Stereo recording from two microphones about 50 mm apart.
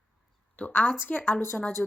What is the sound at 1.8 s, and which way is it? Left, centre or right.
Speech, centre.